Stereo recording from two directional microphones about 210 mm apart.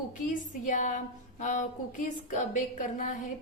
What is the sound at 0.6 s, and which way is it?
A woman's voice, 35° left (ahead or behind).